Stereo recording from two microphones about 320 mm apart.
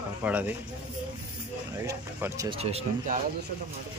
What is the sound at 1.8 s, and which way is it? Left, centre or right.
Speech, centre.